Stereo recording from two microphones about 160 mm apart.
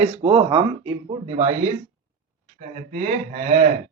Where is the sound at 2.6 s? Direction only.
55° right (ahead or behind).